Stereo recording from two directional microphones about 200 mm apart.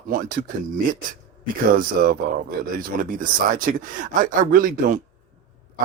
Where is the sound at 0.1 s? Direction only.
45° right (ahead or behind).